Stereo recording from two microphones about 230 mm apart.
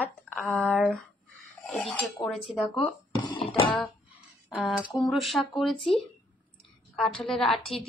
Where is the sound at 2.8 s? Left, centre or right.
Left.